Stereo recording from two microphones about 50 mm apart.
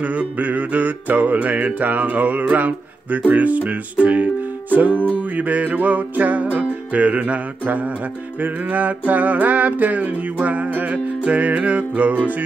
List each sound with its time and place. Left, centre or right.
0.0 s music: right